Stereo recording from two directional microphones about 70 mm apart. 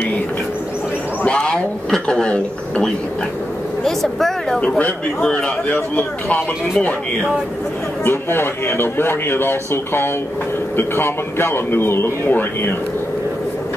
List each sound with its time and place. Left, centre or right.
1.2 s speech: centre
4.6 s speech: left
8.0 s a man's voice: left